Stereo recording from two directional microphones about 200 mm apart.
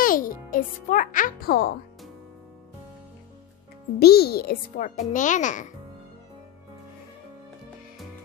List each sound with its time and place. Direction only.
0.0 s a child's voice: 45° left (ahead or behind)
4.0 s a child's voice: 50° left (ahead or behind)